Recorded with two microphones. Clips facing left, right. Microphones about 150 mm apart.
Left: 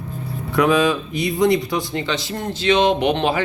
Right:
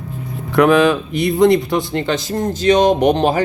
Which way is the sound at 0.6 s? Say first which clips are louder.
Right 5 dB; 60° right (ahead or behind).